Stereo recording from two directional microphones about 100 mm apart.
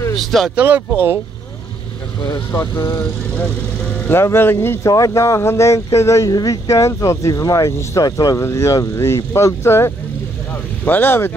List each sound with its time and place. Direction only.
0.2 s speech: centre (ahead or behind)
0.6 s speech: 15° right (ahead or behind)
2.2 s speech: 30° left (ahead or behind)
4.0 s speech: 25° left (ahead or behind)